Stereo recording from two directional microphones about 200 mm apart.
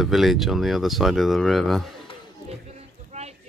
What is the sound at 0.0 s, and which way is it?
Speech, centre (ahead or behind).